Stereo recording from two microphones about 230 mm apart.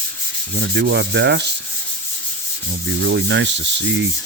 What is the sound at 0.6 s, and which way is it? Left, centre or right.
Rub, right.